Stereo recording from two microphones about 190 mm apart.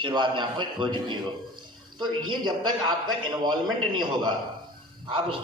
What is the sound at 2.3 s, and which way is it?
Speech, 25° right (ahead or behind).